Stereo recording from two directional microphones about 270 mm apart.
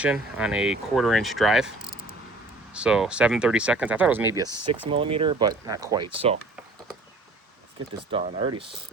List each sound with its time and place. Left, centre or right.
0.0 s speech: centre
2.7 s speech: centre
4.4 s speech: right
4.9 s speech: centre
8.1 s speech: centre